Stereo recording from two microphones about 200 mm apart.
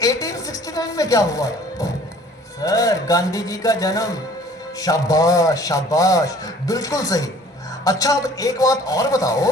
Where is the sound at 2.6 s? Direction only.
15° left (ahead or behind).